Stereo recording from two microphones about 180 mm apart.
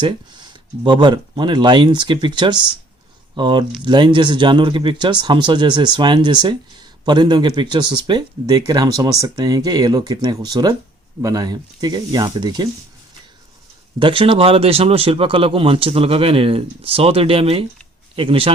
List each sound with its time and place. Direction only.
0.9 s speech: 25° right (ahead or behind)
14.0 s speech: 30° right (ahead or behind)